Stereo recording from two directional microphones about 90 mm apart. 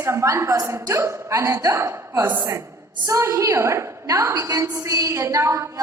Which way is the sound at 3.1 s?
35° right (ahead or behind).